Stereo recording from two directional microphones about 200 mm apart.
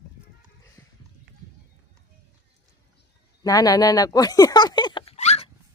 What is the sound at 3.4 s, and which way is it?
Speech, 15° left (ahead or behind).